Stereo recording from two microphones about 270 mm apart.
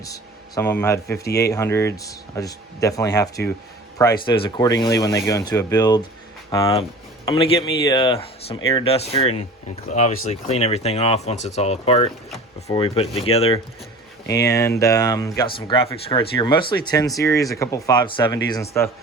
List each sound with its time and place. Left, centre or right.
0.0 s speech: centre
1.2 s speech: left
1.5 s speech: centre